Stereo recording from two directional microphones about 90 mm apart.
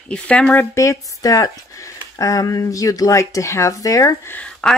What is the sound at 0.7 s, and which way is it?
Speech, 35° left (ahead or behind).